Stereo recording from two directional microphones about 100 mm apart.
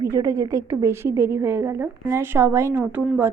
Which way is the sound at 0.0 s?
30° right (ahead or behind).